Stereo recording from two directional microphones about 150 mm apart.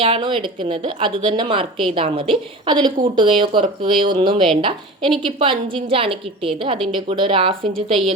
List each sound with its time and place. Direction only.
0.0 s a woman's voice: 35° right (ahead or behind)